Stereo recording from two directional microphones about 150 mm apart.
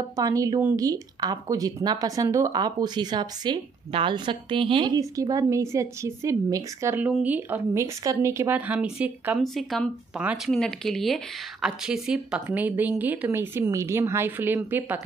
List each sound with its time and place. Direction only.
0.1 s speech: 25° right (ahead or behind)
9.4 s speech: centre (ahead or behind); by 15.0 s 15° right (ahead or behind)